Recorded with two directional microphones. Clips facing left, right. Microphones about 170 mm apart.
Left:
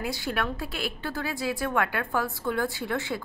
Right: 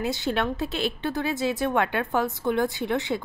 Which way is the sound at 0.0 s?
25° right (ahead or behind).